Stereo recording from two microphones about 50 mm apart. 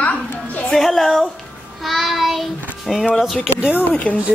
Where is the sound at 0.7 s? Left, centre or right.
Centre.